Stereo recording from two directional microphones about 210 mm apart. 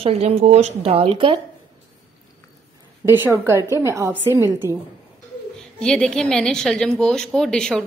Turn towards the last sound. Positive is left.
turn(degrees=5)  # may be behind; listen again after turning